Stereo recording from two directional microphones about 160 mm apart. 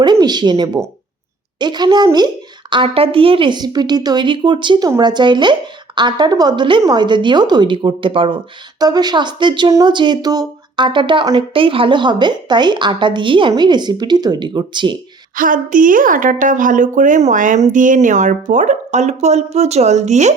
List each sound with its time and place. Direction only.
0.0 s a woman's voice: 25° right (ahead or behind)
15.4 s a woman's voice: 55° right (ahead or behind)